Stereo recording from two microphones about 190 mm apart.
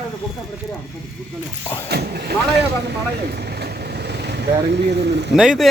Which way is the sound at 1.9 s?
60° right (ahead or behind).